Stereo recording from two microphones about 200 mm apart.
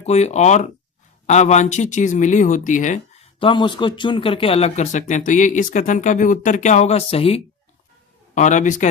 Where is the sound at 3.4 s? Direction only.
25° left (ahead or behind).